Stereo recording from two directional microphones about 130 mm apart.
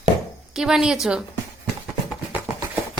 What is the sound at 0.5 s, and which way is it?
Speech, 5° right (ahead or behind).